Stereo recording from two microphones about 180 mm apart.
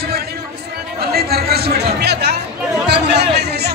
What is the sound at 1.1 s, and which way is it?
Music, 60° right (ahead or behind).